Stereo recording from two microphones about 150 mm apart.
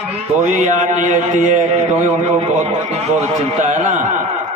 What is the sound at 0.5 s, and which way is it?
A man's voice, 55° right (ahead or behind).